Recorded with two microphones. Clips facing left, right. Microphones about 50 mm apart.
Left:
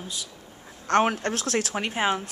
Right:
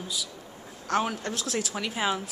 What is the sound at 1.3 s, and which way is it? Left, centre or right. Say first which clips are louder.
Speech: left 4 dB; left.